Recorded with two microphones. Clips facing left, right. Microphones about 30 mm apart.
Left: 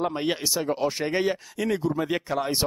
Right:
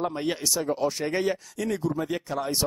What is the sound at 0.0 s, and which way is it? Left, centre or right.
Speech, centre.